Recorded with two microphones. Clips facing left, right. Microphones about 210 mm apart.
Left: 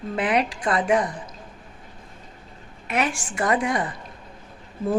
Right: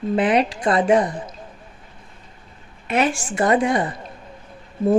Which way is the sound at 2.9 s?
25° right (ahead or behind).